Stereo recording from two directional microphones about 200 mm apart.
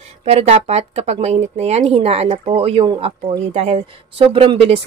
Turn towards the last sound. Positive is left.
turn(degrees=-30)  # may be behind; listen again after turning